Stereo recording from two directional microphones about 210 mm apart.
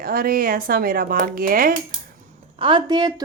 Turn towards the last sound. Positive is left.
turn(degrees=-20)  # may be behind; listen again after turning